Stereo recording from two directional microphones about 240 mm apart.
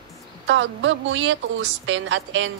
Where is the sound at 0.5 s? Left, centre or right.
Right.